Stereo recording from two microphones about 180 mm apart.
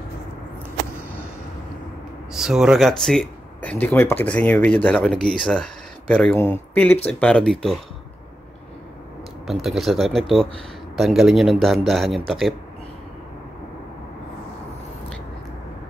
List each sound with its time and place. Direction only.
2.3 s speech: centre (ahead or behind)
9.5 s speech: centre (ahead or behind)